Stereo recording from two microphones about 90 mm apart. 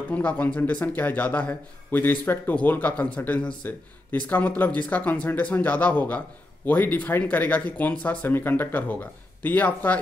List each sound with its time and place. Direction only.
0.1 s speech: 15° left (ahead or behind)